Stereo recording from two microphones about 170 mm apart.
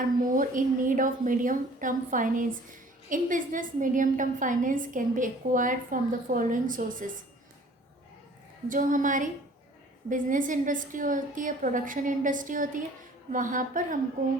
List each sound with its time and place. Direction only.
0.3 s a woman's voice: 50° right (ahead or behind)
8.7 s a woman's voice: 50° right (ahead or behind)